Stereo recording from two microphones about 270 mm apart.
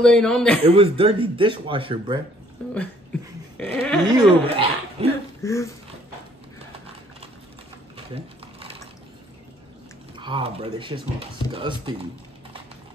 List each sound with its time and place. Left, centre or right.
0.0 s speech: centre
0.7 s speech: right
3.5 s dog: centre
4.1 s speech: centre
5.4 s speech: centre
8.1 s a sound: right
10.1 s speech: centre